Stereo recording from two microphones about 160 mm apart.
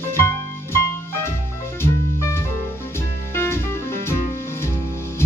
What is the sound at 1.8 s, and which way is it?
Music, 15° left (ahead or behind).